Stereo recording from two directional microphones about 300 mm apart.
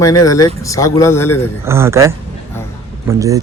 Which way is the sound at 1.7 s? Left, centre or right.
Centre.